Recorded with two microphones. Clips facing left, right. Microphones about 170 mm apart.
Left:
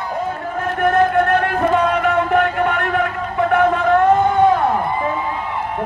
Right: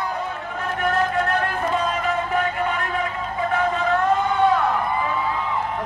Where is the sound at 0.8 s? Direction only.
55° left (ahead or behind).